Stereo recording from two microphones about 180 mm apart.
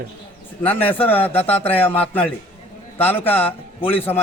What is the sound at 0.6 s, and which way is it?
Speech, 10° left (ahead or behind).